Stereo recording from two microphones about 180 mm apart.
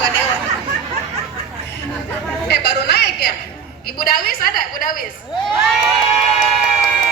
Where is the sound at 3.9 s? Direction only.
55° left (ahead or behind).